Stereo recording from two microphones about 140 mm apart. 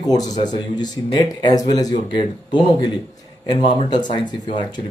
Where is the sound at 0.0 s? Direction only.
25° left (ahead or behind).